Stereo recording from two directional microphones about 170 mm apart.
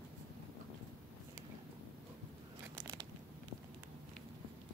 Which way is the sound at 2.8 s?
25° right (ahead or behind).